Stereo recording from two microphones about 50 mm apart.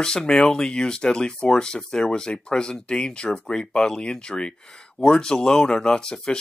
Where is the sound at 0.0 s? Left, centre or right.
Centre.